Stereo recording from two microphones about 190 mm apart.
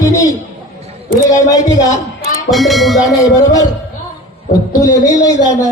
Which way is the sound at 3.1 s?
20° left (ahead or behind).